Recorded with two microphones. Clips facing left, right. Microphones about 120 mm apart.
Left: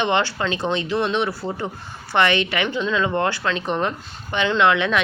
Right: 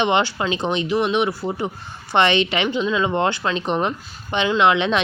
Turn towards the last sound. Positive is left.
turn(degrees=-20)  # may be behind; listen again after turning